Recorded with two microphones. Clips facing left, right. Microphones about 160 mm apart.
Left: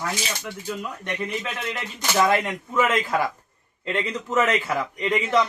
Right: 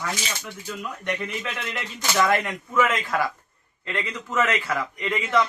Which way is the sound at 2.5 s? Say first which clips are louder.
Even; 25° left (ahead or behind).